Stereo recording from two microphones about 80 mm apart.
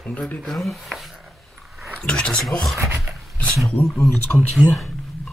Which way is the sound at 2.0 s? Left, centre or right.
Centre.